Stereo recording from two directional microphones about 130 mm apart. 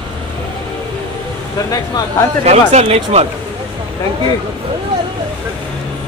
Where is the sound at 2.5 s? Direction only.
55° right (ahead or behind).